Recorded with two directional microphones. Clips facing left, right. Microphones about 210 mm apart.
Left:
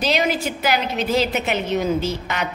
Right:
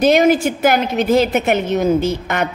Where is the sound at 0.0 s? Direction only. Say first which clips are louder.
Right 9 dB; 50° right (ahead or behind).